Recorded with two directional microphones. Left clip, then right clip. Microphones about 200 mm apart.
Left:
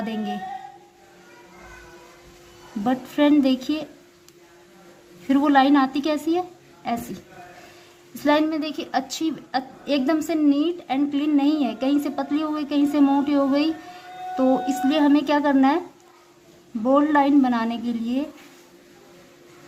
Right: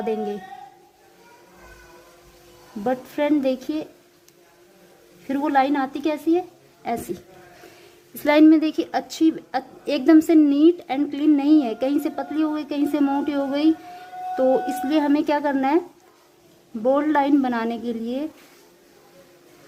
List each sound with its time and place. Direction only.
2.8 s a woman's voice: 20° right (ahead or behind)
5.3 s a woman's voice: 20° right (ahead or behind)
8.2 s a woman's voice: 30° right (ahead or behind)
16.8 s a woman's voice: 25° right (ahead or behind)